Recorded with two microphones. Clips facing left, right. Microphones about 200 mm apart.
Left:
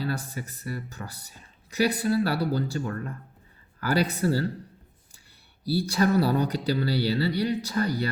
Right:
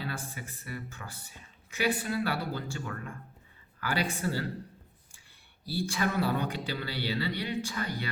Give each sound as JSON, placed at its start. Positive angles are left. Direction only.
{"t": 0.0, "sound": "speech", "side_deg": 40}
{"t": 5.6, "sound": "speech", "side_deg": 40}